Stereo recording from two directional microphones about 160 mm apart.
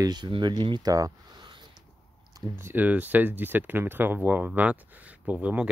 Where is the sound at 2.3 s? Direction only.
15° right (ahead or behind).